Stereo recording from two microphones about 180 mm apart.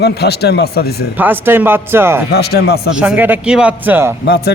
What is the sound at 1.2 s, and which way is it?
Speech, 10° right (ahead or behind).